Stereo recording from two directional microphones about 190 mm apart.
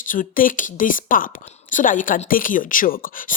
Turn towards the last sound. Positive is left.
turn(degrees=45)  # may be behind; listen again after turning